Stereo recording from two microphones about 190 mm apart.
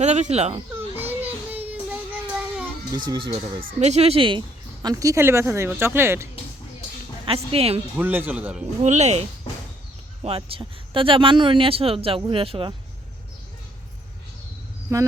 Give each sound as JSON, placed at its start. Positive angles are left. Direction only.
{"t": 0.0, "sound": "speech", "side_deg": -35}
{"t": 0.7, "sound": "children playing", "side_deg": -10}
{"t": 1.5, "sound": "child singing", "side_deg": -10}
{"t": 2.9, "sound": "speech", "side_deg": -25}
{"t": 3.6, "sound": "speech", "side_deg": -50}
{"t": 3.8, "sound": "speech", "side_deg": -35}
{"t": 7.3, "sound": "speech", "side_deg": -30}
{"t": 7.9, "sound": "speech", "side_deg": -10}
{"t": 8.8, "sound": "speech", "side_deg": -35}
{"t": 10.2, "sound": "speech", "side_deg": -30}
{"t": 14.9, "sound": "speech", "side_deg": -15}